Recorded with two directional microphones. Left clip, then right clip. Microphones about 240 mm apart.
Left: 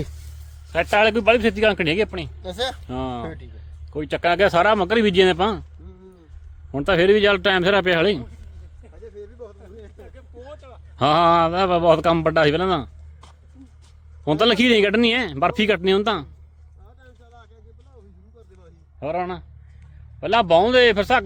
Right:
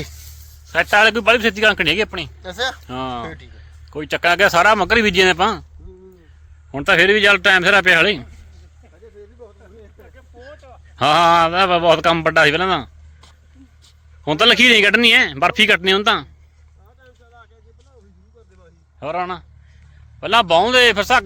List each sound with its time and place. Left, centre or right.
0.7 s a man's voice: centre
2.8 s a man's voice: centre
3.2 s a man's voice: centre
3.9 s a man's voice: centre
6.7 s a man's voice: centre
10.9 s a man's voice: centre
17.0 s a sound: left
18.9 s a man's voice: centre